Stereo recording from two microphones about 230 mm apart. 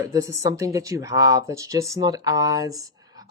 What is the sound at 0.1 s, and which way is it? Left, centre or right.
Speech, centre.